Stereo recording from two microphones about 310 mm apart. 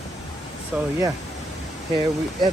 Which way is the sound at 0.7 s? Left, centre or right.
Centre.